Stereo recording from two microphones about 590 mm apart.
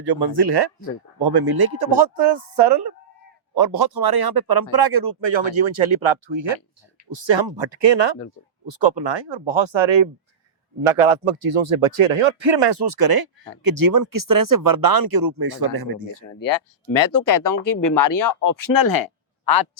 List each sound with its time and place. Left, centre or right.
0.0 s speech: right
16.1 s speech: left